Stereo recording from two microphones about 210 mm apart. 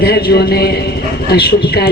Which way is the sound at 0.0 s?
50° left (ahead or behind).